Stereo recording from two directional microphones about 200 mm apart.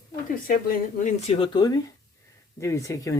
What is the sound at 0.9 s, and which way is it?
Speech, 35° left (ahead or behind).